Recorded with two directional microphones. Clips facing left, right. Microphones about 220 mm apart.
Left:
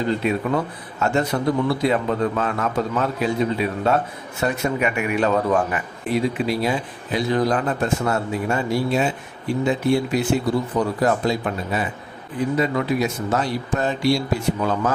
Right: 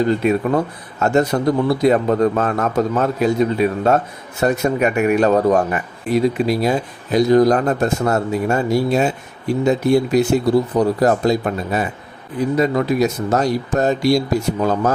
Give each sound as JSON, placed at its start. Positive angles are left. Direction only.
{"t": 1.0, "sound": "a man's voice", "side_deg": -40}